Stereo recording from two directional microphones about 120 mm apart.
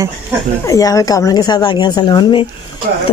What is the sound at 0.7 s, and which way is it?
A woman's voice, 30° left (ahead or behind).